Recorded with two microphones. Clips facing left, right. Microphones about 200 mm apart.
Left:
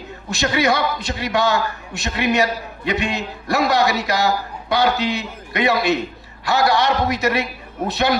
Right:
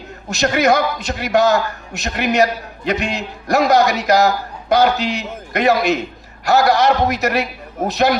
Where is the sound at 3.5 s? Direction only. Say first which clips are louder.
Right 4 dB; 40° right (ahead or behind).